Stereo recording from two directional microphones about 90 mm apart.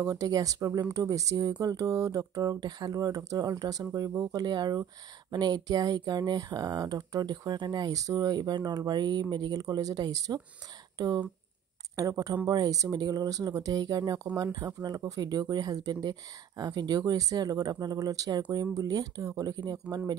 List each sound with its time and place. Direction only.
0.0 s speech: 40° right (ahead or behind)